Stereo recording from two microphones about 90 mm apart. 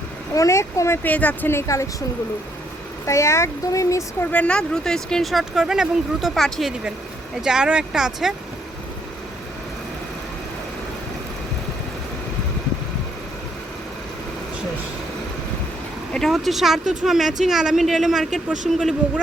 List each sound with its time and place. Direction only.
0.3 s speech: 35° left (ahead or behind)
1.0 s speech: 15° left (ahead or behind)
1.5 s speech: 30° left (ahead or behind)
3.1 s speech: 30° left (ahead or behind)
4.2 s speech: 15° left (ahead or behind)
7.4 s speech: 10° right (ahead or behind)
16.1 s speech: 5° left (ahead or behind)